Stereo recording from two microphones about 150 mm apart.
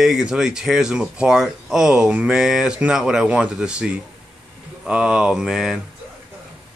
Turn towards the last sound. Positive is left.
turn(degrees=0)  # may be behind; listen again after turning